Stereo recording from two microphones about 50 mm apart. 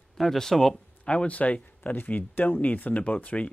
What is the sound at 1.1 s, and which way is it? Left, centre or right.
Speech, left.